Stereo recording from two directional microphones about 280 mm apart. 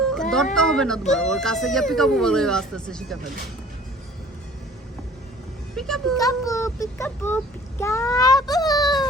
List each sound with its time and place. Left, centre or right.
0.1 s cat: centre
0.5 s speech: centre
5.7 s speech: centre
6.1 s a child's voice: centre